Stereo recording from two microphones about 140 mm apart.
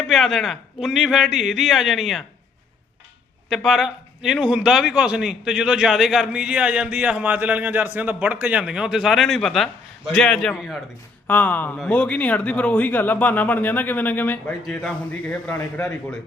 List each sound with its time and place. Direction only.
0.0 s a man's voice: centre (ahead or behind)
3.5 s a man's voice: centre (ahead or behind)